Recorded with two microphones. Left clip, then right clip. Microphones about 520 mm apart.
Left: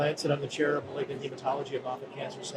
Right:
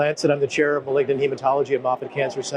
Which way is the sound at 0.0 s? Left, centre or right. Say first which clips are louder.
Right 9 dB; right.